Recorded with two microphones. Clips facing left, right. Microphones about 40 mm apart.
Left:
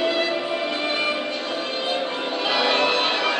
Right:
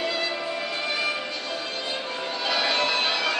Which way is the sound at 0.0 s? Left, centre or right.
Left.